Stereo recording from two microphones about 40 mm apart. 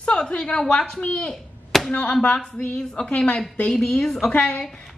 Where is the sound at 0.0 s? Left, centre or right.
Left.